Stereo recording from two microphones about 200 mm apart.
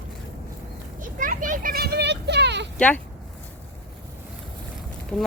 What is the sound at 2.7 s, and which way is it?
Speech, 5° left (ahead or behind).